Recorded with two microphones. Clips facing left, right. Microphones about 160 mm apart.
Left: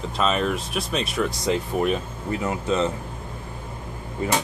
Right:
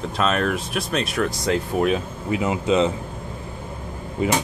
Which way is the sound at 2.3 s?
15° right (ahead or behind).